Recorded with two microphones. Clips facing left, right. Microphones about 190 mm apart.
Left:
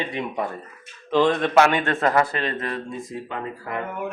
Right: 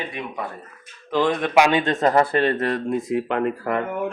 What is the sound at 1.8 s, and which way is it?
Speech, 40° right (ahead or behind).